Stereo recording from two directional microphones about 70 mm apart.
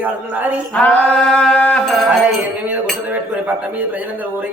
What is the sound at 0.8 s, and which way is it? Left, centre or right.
Mantra, centre.